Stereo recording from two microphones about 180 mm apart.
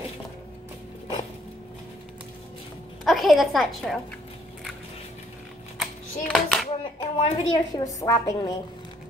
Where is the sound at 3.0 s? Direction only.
Centre (ahead or behind).